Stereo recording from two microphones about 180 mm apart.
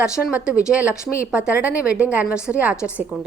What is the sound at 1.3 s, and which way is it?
A woman's voice, 5° right (ahead or behind).